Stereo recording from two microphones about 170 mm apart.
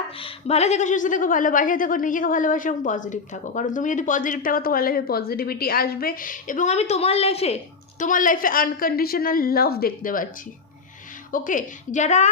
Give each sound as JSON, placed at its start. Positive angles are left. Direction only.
{"t": 0.2, "sound": "a woman's voice", "side_deg": 40}
{"t": 11.3, "sound": "a woman's voice", "side_deg": 50}